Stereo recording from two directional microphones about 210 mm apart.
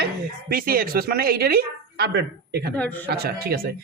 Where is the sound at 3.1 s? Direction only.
50° right (ahead or behind).